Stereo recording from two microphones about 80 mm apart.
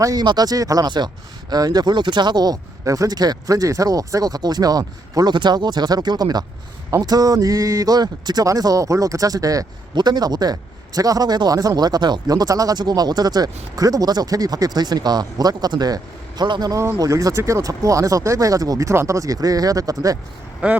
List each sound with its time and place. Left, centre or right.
0.0 s speech: right
0.9 s speech: right
5.3 s speech: right
8.4 s speech: right
9.9 s speech: right
17.0 s speech: right
20.6 s speech: centre